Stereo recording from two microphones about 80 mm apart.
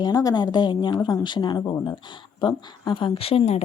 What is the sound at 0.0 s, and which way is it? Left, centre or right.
A woman's voice, left.